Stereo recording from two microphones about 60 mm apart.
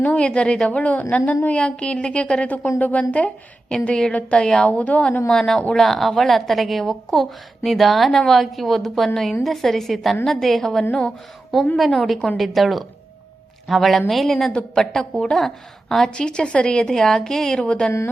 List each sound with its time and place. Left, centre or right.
0.0 s a woman's voice: left
5.3 s a woman's voice: centre